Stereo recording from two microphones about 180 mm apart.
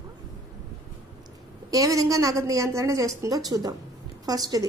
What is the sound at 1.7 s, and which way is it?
A woman's voice, 20° right (ahead or behind).